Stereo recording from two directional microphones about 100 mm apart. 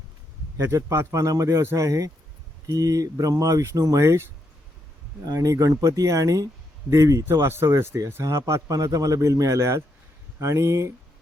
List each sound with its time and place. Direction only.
0.5 s a man's voice: 30° right (ahead or behind)
5.2 s a man's voice: 35° right (ahead or behind)